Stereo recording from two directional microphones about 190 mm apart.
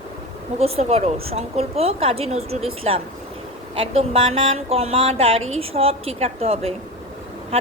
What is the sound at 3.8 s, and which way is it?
Speech, 30° right (ahead or behind).